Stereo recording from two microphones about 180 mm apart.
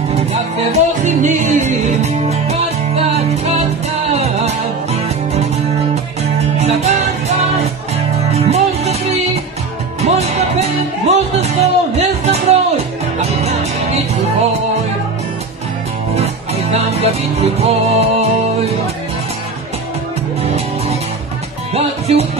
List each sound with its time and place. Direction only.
0.7 s music: 40° right (ahead or behind)
6.6 s music: 35° right (ahead or behind)
8.5 s music: 35° right (ahead or behind)
16.7 s music: 35° right (ahead or behind)
21.7 s music: 35° right (ahead or behind)